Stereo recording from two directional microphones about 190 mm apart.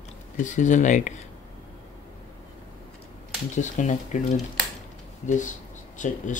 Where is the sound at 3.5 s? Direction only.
40° left (ahead or behind).